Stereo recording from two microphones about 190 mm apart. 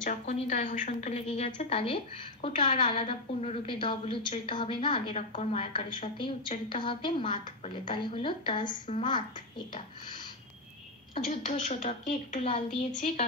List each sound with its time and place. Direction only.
0.0 s a woman's voice: 40° left (ahead or behind); by 9.7 s 25° left (ahead or behind)
11.2 s a woman's voice: 40° left (ahead or behind)